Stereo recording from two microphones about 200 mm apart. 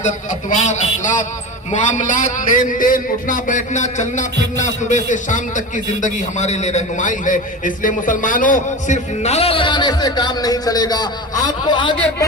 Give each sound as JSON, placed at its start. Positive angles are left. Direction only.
{"t": 0.5, "sound": "a man's voice", "side_deg": 35}